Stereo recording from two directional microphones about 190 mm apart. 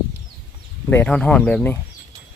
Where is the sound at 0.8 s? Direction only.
10° left (ahead or behind).